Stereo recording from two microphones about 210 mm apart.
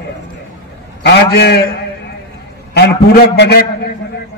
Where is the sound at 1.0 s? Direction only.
50° left (ahead or behind).